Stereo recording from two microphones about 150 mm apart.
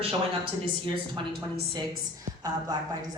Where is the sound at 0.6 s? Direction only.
35° right (ahead or behind).